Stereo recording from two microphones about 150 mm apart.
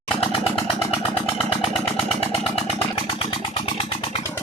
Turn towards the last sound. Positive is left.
turn(degrees=40)  # may be behind; listen again after turning